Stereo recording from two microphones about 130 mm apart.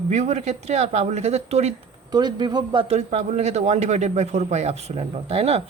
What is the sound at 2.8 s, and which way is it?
A man's voice, 55° right (ahead or behind).